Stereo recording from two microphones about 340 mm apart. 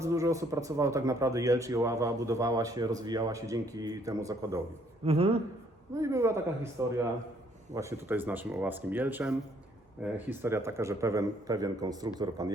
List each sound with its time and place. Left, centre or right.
0.0 s speech: centre